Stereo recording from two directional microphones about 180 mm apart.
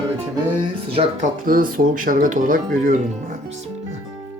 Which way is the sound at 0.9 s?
45° right (ahead or behind).